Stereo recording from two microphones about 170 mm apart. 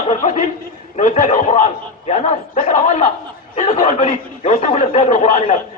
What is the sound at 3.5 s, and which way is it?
A man's voice, 40° left (ahead or behind).